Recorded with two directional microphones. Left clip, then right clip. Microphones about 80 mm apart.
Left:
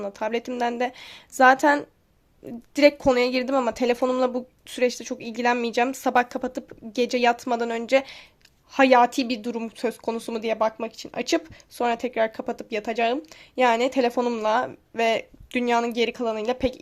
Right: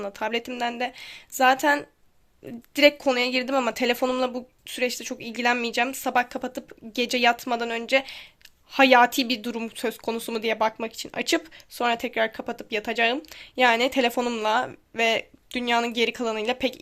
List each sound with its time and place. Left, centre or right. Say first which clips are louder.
0.0 s a woman's voice: left 1 dB; left
0.4 s a woman's voice: left 3 dB; left
4.2 s speech: left 3 dB; left
4.8 s speech: left 3 dB; left
7.3 s a woman's voice: left 1 dB; left
8.7 s a woman's voice: even; left